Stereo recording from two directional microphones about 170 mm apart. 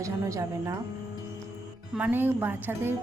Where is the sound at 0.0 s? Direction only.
20° right (ahead or behind).